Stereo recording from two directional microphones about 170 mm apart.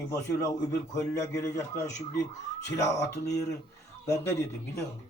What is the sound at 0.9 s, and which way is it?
Speech, 15° left (ahead or behind).